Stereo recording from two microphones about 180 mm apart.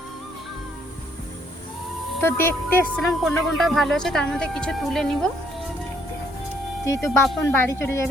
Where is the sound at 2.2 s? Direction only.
10° left (ahead or behind).